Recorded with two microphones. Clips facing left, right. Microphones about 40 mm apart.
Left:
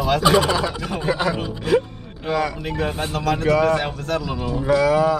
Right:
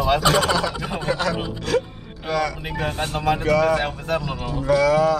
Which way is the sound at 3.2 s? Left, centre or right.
Centre.